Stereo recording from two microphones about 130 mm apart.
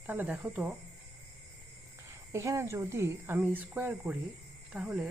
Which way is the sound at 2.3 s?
25° right (ahead or behind).